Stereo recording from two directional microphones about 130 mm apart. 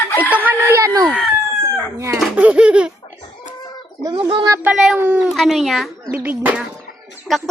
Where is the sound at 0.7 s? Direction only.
25° right (ahead or behind).